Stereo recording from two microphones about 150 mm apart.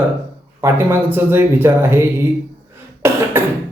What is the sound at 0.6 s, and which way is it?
A man's voice, 15° right (ahead or behind).